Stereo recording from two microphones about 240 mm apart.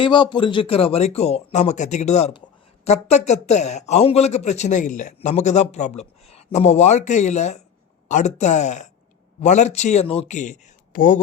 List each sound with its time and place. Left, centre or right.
0.0 s a man's voice: centre